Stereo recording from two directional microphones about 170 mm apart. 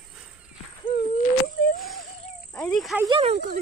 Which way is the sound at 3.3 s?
60° right (ahead or behind).